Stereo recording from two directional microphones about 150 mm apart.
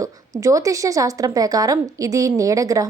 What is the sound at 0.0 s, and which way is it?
A woman's voice, 20° right (ahead or behind).